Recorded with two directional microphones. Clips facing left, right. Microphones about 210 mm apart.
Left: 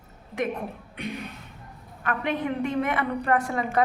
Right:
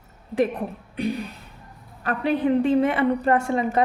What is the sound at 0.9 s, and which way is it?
A woman's voice, 35° right (ahead or behind).